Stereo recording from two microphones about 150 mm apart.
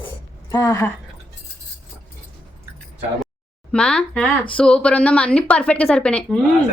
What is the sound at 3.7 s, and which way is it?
Speech, 5° left (ahead or behind).